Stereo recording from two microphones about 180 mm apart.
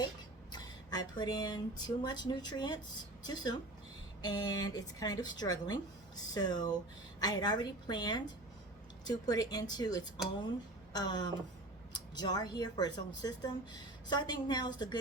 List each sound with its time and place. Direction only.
0.5 s speech: 20° left (ahead or behind)